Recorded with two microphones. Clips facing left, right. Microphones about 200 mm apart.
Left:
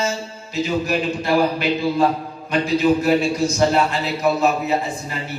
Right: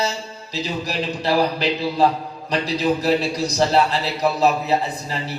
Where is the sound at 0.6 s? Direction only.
35° right (ahead or behind).